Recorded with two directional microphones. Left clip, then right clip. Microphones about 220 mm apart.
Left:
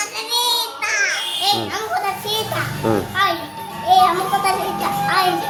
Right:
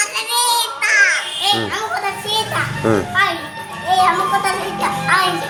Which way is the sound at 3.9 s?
15° left (ahead or behind).